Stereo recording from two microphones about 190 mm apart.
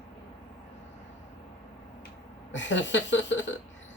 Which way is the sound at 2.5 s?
70° left (ahead or behind).